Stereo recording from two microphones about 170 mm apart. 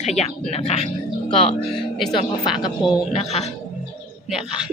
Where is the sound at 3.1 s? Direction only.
40° left (ahead or behind).